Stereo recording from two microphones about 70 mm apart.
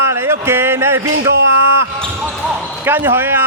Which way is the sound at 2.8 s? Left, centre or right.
Right.